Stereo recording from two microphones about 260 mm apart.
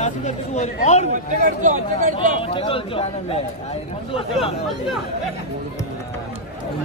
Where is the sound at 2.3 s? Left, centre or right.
Left.